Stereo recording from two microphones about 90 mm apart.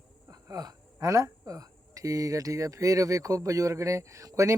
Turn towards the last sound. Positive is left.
turn(degrees=-35)  # may be behind; listen again after turning